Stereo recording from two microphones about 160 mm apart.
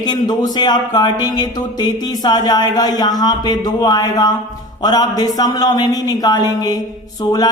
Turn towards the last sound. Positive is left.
turn(degrees=25)  # may be behind; listen again after turning